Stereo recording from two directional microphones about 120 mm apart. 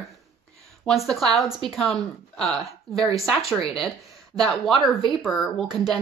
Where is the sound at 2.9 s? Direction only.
35° right (ahead or behind).